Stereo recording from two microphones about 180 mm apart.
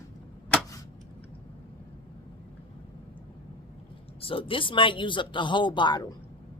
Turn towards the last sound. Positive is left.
turn(degrees=25)  # may be behind; listen again after turning